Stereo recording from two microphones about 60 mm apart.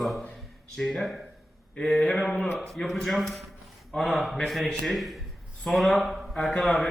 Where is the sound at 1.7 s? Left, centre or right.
Centre.